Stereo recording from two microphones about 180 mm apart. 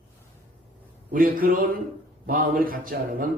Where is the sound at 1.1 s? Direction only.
50° right (ahead or behind).